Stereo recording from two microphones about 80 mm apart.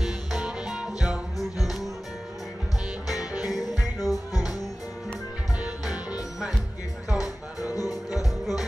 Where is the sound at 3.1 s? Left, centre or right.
Left.